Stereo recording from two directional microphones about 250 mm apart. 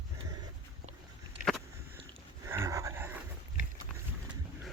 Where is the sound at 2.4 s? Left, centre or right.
Centre.